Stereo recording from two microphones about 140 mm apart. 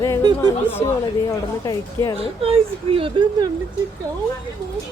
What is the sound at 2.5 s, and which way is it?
A woman's voice, 40° right (ahead or behind).